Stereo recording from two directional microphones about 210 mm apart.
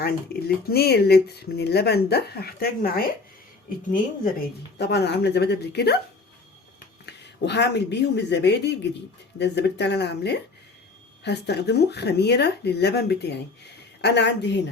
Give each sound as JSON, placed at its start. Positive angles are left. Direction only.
{"t": 0.0, "sound": "speech", "side_deg": 50}
{"t": 4.8, "sound": "speech", "side_deg": 50}
{"t": 7.0, "sound": "a woman's voice", "side_deg": 55}